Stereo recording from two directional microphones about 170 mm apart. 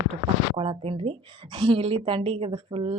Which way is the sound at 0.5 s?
30° right (ahead or behind).